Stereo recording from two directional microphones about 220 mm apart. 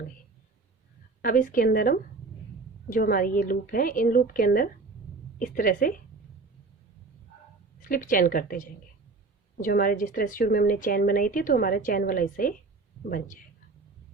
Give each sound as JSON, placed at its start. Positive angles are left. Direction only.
{"t": 1.2, "sound": "a woman's voice", "side_deg": 40}
{"t": 7.8, "sound": "a woman's voice", "side_deg": 40}